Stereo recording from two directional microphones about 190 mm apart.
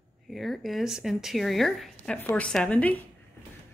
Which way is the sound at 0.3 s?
Centre (ahead or behind).